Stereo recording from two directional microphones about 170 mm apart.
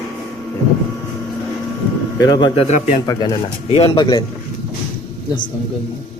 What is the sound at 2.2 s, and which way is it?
Speech, 25° left (ahead or behind).